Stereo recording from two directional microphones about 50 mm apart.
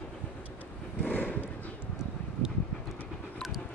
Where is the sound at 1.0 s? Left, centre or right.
Left.